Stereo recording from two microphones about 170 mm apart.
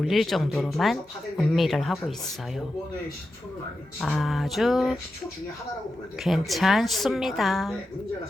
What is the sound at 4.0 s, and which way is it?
Speech, centre (ahead or behind).